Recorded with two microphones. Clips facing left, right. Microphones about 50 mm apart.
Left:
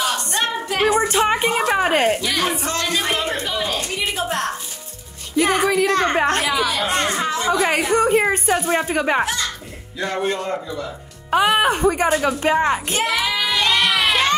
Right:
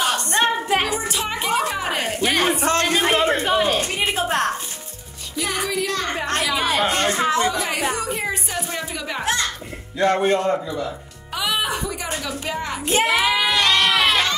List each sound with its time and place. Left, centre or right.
0.4 s singing: right
0.8 s a sound: left
2.2 s a sound: right
5.3 s music: left
6.5 s chatter: right
6.9 s speech: left
8.2 s a sound: left
10.0 s a man's voice: right
10.4 s a man's voice: centre
11.2 s a woman's voice: left
12.9 s child singing: right
13.2 s music: centre
13.6 s music: centre